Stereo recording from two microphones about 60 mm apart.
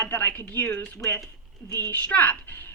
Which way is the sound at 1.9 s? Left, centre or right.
Left.